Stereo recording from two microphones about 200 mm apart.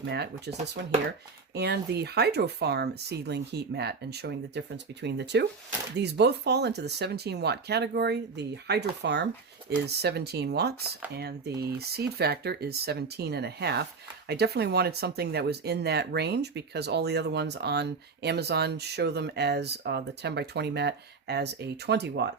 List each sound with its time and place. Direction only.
0.1 s speech: 55° right (ahead or behind)
1.5 s speech: 55° right (ahead or behind)